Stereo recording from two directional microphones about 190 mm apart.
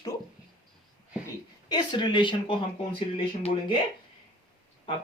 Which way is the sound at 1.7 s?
25° left (ahead or behind).